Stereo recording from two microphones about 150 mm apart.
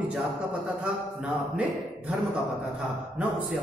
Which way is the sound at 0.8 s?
5° right (ahead or behind).